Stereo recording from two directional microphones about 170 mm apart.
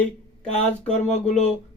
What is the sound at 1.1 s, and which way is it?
Speech, 40° left (ahead or behind).